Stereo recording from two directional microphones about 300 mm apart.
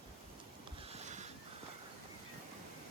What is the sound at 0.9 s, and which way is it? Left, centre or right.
Boat, right.